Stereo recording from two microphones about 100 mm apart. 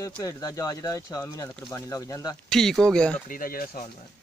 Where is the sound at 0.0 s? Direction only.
40° left (ahead or behind).